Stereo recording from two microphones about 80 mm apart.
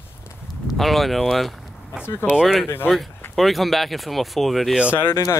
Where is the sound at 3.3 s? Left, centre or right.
Centre.